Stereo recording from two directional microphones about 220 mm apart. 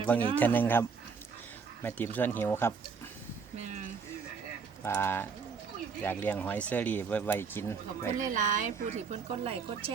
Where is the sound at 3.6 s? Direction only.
30° right (ahead or behind).